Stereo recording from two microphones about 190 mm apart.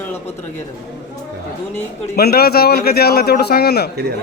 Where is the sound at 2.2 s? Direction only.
55° left (ahead or behind).